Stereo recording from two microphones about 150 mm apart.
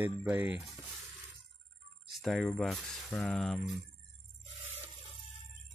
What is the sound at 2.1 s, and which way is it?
Speech, centre (ahead or behind).